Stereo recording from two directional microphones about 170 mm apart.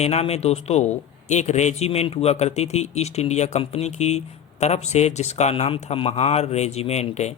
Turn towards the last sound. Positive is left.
turn(degrees=40)  # may be behind; listen again after turning